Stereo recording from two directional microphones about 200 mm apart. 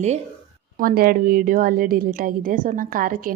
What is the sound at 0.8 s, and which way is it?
Speech, 50° right (ahead or behind).